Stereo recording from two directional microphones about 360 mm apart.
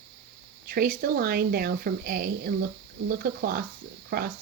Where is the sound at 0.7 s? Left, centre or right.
Right.